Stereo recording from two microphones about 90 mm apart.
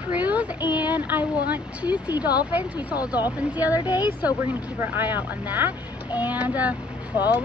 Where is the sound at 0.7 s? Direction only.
20° right (ahead or behind).